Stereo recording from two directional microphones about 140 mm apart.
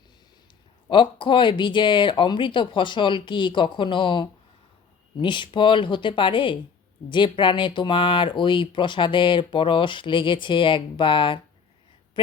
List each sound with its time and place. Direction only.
0.9 s speech: 35° left (ahead or behind)